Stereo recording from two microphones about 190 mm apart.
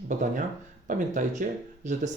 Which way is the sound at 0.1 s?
40° right (ahead or behind).